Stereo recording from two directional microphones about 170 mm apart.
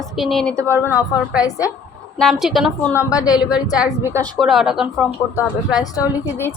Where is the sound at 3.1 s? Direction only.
20° left (ahead or behind).